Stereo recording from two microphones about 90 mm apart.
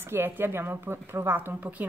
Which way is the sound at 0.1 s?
25° right (ahead or behind).